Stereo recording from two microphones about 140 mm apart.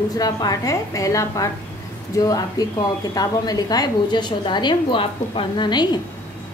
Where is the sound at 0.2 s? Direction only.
25° left (ahead or behind).